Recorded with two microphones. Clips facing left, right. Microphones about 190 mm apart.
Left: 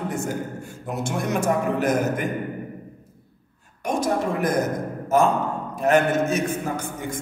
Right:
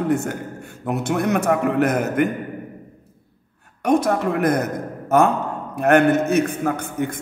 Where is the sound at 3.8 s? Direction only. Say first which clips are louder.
Right 5 dB; 60° right (ahead or behind).